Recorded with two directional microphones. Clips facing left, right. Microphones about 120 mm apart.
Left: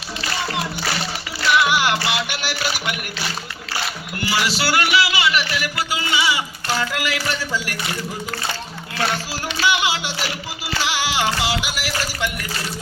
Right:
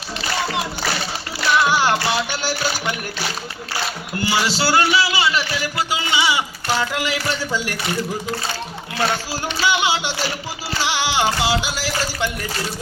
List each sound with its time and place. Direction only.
1.6 s music: 35° right (ahead or behind)
4.2 s music: 25° right (ahead or behind)
9.3 s music: 25° right (ahead or behind)